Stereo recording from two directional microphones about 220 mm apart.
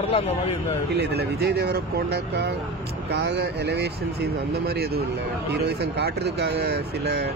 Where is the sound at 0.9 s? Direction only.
50° right (ahead or behind).